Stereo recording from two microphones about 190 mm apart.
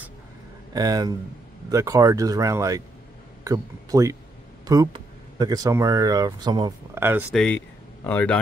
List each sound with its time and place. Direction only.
0.7 s speech: 20° right (ahead or behind)
7.3 s speech: 5° left (ahead or behind)